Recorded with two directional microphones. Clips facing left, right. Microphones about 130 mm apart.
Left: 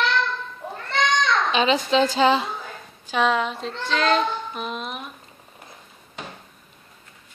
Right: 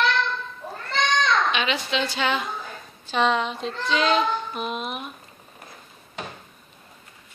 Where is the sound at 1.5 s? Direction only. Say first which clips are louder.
Left 6 dB; 35° left (ahead or behind).